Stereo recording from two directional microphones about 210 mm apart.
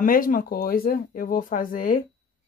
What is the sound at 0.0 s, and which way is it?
Speech, 40° left (ahead or behind).